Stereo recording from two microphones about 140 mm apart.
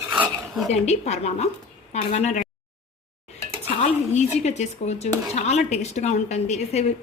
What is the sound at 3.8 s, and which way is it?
Speech, 55° left (ahead or behind).